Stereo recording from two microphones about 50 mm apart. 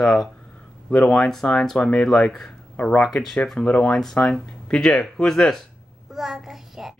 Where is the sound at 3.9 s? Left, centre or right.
Centre.